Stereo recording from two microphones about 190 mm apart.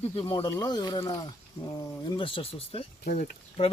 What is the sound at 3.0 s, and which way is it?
Speech, 50° left (ahead or behind).